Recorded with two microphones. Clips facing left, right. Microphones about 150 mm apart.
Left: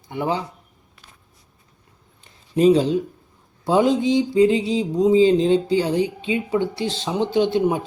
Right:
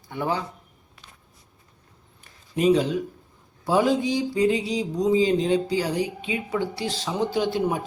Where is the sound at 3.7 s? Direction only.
20° left (ahead or behind).